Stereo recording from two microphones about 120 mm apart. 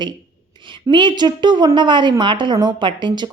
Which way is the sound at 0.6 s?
40° right (ahead or behind).